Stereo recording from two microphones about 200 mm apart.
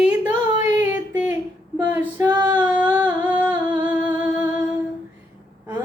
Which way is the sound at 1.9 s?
10° right (ahead or behind).